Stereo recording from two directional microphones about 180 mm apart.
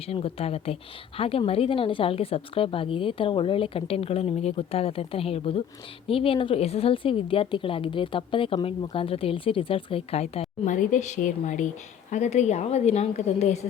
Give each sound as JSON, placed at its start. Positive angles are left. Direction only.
{"t": 0.0, "sound": "a woman's voice", "side_deg": 35}